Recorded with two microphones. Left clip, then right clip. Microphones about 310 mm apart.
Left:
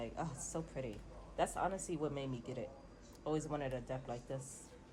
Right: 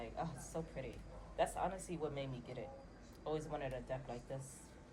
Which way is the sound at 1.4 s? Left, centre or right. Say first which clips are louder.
Left 1 dB; left.